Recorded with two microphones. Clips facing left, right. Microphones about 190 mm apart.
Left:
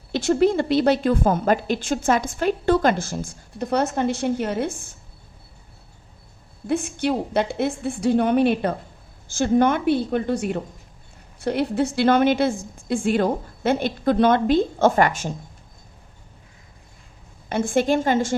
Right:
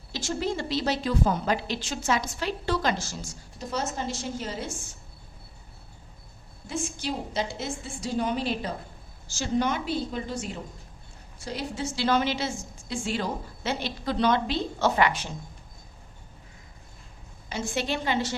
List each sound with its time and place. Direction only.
0.1 s a woman's voice: 60° left (ahead or behind)
6.7 s a woman's voice: 60° left (ahead or behind)
17.5 s a woman's voice: 55° left (ahead or behind)